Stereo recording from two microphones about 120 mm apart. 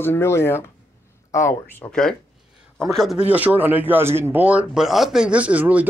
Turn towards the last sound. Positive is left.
turn(degrees=-15)  # may be behind; listen again after turning